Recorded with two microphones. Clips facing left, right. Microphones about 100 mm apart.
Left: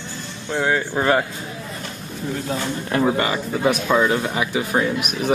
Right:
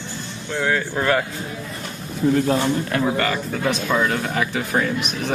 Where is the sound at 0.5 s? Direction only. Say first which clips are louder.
Left 1 dB; 20° left (ahead or behind).